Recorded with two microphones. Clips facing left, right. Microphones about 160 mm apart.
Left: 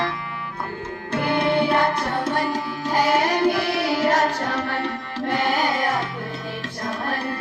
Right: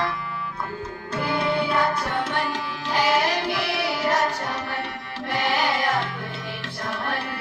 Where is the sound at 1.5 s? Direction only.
40° left (ahead or behind).